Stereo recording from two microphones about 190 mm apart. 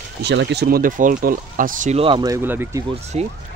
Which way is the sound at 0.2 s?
65° right (ahead or behind).